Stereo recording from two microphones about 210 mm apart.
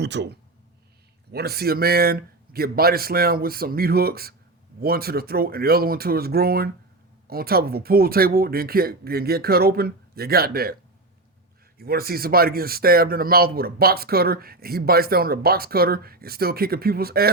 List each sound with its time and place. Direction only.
0.0 s speech: 55° right (ahead or behind)
11.8 s speech: 45° right (ahead or behind)